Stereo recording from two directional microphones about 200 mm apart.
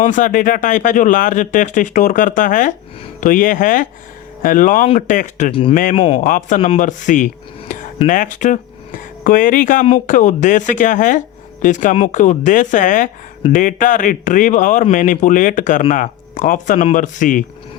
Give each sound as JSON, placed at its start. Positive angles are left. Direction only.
{"t": 0.0, "sound": "speech", "side_deg": 40}